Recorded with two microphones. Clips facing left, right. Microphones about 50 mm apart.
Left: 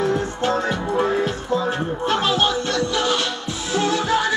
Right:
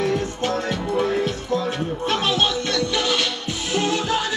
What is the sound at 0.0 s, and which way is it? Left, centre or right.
Music, left.